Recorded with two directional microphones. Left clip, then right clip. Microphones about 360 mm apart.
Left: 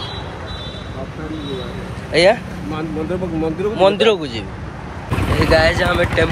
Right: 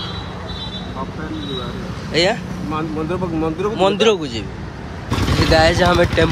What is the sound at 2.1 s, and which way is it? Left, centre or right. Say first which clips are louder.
Speech: left 4 dB; centre.